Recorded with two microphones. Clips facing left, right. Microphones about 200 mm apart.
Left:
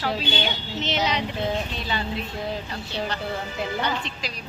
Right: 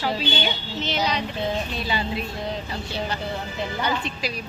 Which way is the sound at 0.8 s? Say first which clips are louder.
Even; 20° left (ahead or behind).